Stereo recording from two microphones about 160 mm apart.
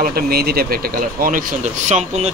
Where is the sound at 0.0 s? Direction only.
75° right (ahead or behind).